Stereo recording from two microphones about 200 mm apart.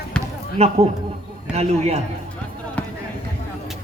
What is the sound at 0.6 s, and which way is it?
A man's voice, 30° right (ahead or behind).